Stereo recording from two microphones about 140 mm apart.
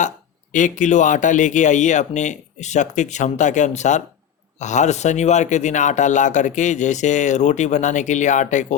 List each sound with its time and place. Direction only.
0.5 s speech: 65° left (ahead or behind)